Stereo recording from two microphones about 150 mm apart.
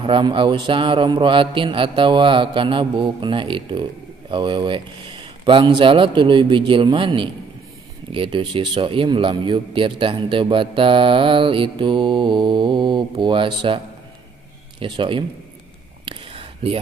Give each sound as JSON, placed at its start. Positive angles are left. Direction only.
{"t": 0.0, "sound": "a man's voice", "side_deg": -35}
{"t": 14.8, "sound": "a man's voice", "side_deg": -35}
{"t": 16.1, "sound": "a sound", "side_deg": -35}